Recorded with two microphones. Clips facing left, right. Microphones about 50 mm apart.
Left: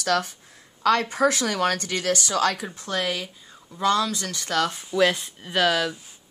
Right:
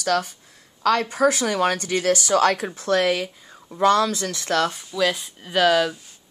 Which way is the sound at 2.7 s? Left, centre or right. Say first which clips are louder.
Right 7 dB; right.